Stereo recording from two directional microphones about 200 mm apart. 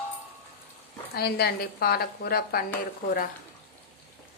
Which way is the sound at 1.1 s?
50° left (ahead or behind).